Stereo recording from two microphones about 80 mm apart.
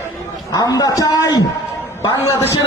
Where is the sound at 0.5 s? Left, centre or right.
Left.